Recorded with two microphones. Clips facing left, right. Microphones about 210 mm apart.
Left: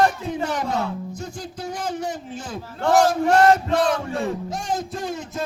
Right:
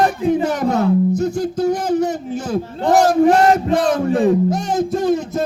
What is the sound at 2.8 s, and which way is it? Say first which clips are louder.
Speech: right 5 dB; 20° right (ahead or behind).